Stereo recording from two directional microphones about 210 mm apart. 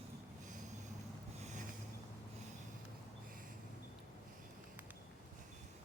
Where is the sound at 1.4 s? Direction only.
35° right (ahead or behind).